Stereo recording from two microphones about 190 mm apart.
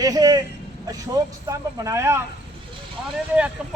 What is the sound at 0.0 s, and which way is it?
Vehicle, 20° right (ahead or behind).